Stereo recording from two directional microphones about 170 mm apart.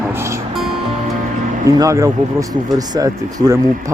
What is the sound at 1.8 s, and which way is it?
Speech, 20° right (ahead or behind).